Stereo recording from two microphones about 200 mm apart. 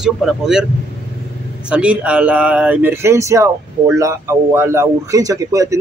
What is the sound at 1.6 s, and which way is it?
A man's voice, 5° right (ahead or behind).